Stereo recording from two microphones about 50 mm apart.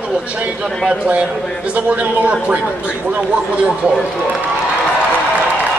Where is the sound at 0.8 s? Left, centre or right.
Right.